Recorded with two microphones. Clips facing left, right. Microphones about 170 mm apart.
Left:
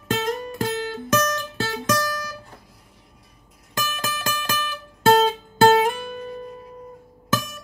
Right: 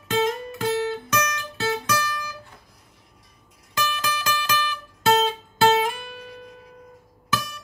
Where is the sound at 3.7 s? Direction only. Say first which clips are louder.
Right 2 dB; 45° left (ahead or behind).